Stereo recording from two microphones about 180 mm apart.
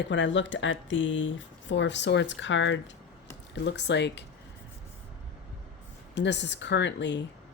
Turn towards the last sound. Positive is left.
turn(degrees=80)